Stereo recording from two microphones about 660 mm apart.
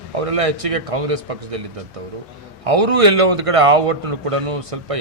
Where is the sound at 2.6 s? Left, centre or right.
Right.